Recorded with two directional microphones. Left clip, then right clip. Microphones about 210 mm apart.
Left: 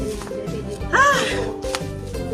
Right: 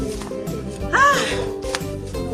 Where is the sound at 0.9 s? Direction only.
Centre (ahead or behind).